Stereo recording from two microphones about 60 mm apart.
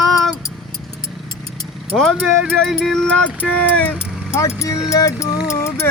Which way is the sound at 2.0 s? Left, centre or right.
Centre.